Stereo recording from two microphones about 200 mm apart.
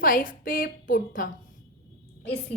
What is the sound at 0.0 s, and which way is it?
A woman's voice, 45° left (ahead or behind).